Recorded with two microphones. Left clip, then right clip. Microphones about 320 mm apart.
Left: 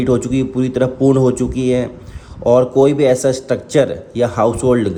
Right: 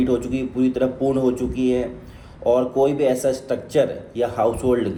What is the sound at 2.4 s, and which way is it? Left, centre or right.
Speech, left.